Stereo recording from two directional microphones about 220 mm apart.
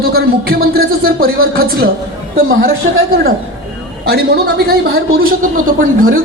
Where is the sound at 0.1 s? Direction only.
45° right (ahead or behind).